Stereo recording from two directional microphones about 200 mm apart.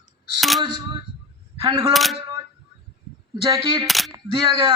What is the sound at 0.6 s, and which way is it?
Speech, 20° right (ahead or behind).